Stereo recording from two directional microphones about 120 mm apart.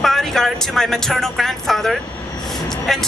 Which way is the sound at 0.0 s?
5° left (ahead or behind).